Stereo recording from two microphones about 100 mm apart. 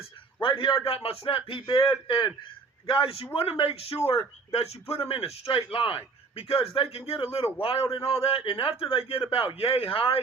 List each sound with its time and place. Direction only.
0.4 s a man's voice: 65° left (ahead or behind)
3.6 s a man's voice: 85° left; by 10.2 s 65° left (ahead or behind)